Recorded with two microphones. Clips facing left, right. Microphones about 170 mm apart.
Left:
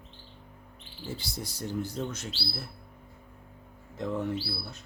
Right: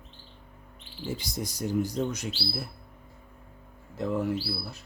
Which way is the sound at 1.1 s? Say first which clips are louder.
Right 4 dB; 15° right (ahead or behind).